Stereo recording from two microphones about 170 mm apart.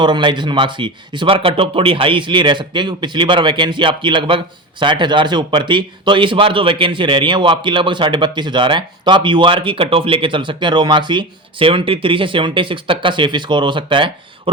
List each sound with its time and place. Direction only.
0.0 s a man's voice: 25° right (ahead or behind)